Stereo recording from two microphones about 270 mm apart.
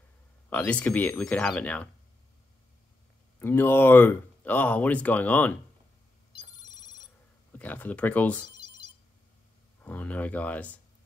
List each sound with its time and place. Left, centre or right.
0.5 s speech: centre
3.3 s speech: centre
6.5 s ringtone: centre
7.5 s speech: centre
9.8 s speech: centre